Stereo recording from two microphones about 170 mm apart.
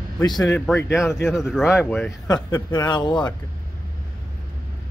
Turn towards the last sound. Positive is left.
turn(degrees=25)  # may be behind; listen again after turning